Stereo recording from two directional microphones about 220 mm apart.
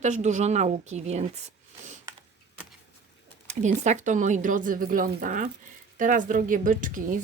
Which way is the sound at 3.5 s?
30° right (ahead or behind).